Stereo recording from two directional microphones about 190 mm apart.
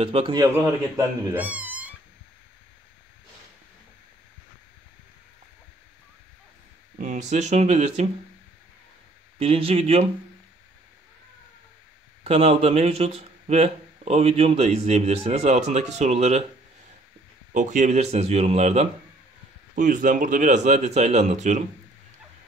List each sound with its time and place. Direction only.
0.0 s a man's voice: 30° right (ahead or behind)
0.4 s speech: 15° right (ahead or behind)
7.0 s a man's voice: 40° right (ahead or behind)
9.4 s a man's voice: 30° right (ahead or behind)
12.2 s a man's voice: 35° right (ahead or behind)
17.6 s a man's voice: 40° right (ahead or behind)